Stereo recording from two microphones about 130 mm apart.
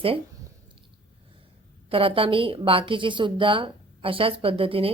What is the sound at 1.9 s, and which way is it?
A woman's voice, 45° right (ahead or behind).